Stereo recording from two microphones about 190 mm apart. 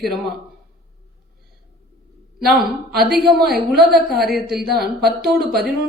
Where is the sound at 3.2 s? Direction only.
Centre (ahead or behind).